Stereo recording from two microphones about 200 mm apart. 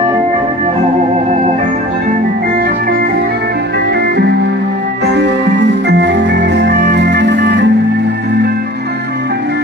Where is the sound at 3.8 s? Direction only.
55° right (ahead or behind).